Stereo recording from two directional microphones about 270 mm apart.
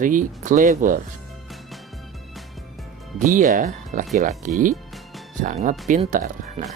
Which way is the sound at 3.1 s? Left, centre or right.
Right.